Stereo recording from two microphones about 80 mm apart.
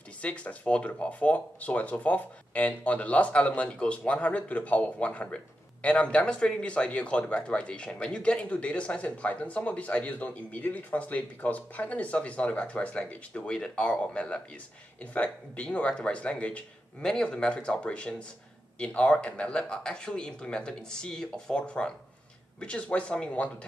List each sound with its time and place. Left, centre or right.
0.2 s speech: centre